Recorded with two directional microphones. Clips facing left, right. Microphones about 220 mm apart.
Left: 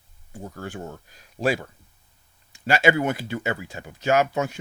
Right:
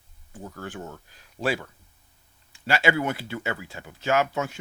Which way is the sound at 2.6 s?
15° left (ahead or behind).